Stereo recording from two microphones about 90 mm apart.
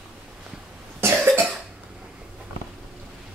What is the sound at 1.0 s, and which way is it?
Cough, 30° right (ahead or behind).